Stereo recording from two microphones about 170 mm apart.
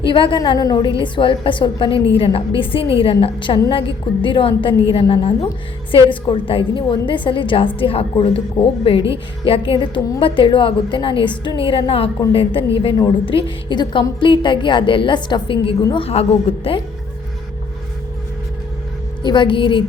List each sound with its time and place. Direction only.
0.0 s a woman's voice: 30° left (ahead or behind)
19.2 s a woman's voice: 30° left (ahead or behind)